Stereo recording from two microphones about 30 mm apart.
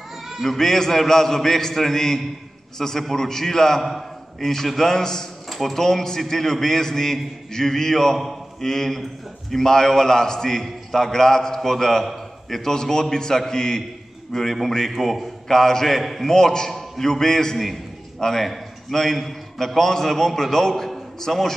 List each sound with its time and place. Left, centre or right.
0.4 s a man's voice: centre
5.5 s a sound: centre
5.8 s a man's voice: centre
14.3 s a man's voice: centre
15.4 s a man's voice: centre
16.0 s a man's voice: centre
16.3 s a man's voice: centre